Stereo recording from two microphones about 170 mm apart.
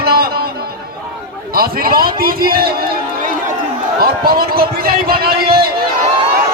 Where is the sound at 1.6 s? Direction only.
60° right (ahead or behind).